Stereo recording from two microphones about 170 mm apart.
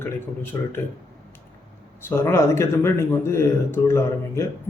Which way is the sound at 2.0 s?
15° left (ahead or behind).